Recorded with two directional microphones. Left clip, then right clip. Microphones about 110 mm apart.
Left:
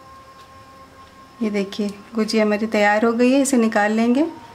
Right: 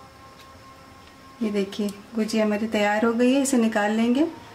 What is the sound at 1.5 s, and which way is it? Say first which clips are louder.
Speech: left 1 dB; 30° left (ahead or behind).